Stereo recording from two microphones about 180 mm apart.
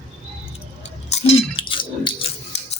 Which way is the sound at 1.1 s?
30° left (ahead or behind).